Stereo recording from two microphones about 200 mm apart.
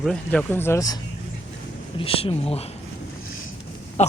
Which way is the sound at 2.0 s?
25° left (ahead or behind).